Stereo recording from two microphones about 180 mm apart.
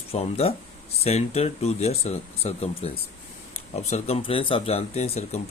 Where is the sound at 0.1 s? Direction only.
35° left (ahead or behind).